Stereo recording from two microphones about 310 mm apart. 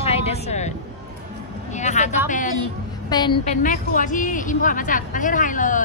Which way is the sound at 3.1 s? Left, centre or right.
Centre.